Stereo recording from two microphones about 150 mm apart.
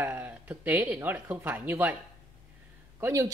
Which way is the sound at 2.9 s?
20° right (ahead or behind).